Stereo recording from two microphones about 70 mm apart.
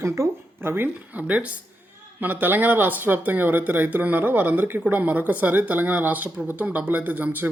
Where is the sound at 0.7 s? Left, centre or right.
Right.